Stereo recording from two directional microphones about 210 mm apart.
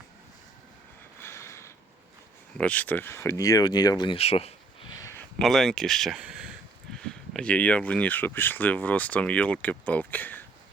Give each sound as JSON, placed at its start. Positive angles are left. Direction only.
{"t": 1.2, "sound": "a sound", "side_deg": 15}
{"t": 2.6, "sound": "speech", "side_deg": 5}
{"t": 5.4, "sound": "speech", "side_deg": 0}